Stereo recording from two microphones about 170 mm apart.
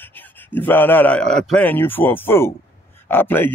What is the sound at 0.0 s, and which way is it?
A man's voice, 10° left (ahead or behind).